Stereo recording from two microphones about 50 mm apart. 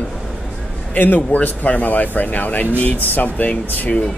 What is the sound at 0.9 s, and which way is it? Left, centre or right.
Speech, left.